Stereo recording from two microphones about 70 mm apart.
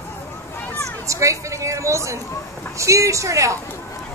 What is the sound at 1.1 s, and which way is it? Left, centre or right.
Speech, right.